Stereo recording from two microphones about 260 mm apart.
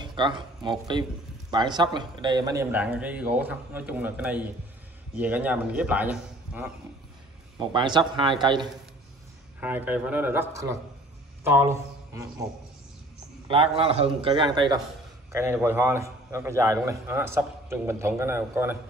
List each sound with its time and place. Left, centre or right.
0.0 s a man's voice: centre
7.5 s a man's voice: centre
9.6 s a man's voice: centre
13.5 s a man's voice: right